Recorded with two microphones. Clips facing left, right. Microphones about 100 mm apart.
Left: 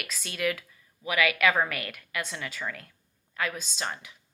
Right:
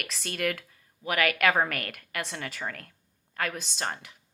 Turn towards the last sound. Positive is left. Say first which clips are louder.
# right 1 dB
turn(degrees=-50)  # may be behind; listen again after turning